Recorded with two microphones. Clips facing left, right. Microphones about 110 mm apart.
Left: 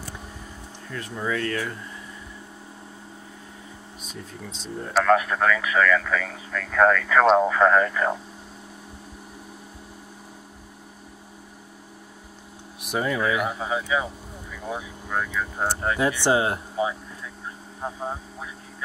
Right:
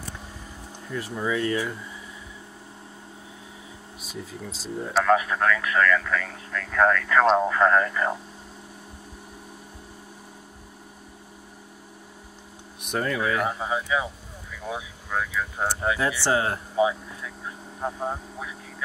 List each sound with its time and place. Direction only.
0.8 s speech: 10° right (ahead or behind)
4.0 s speech: 5° right (ahead or behind)
12.8 s speech: 5° left (ahead or behind)
16.0 s speech: 20° left (ahead or behind)
17.7 s speech: centre (ahead or behind)